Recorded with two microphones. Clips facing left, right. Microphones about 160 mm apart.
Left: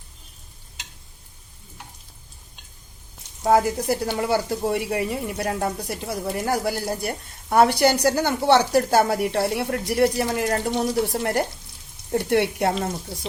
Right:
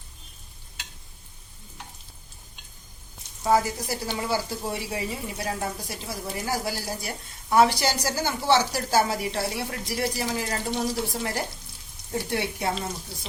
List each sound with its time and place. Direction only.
3.4 s speech: 55° left (ahead or behind)